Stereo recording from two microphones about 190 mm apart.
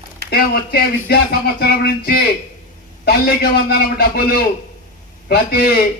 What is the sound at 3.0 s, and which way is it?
A man's voice, 55° left (ahead or behind).